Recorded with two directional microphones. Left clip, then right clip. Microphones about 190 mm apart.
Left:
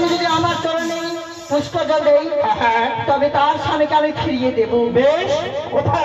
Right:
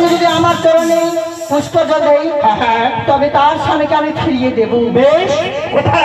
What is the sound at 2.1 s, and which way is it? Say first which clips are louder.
Speech: right 4 dB; 5° left (ahead or behind).